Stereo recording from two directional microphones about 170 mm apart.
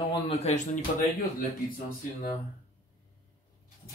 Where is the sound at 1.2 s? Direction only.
55° left (ahead or behind).